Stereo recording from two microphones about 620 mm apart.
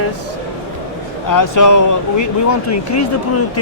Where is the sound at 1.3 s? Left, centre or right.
Left.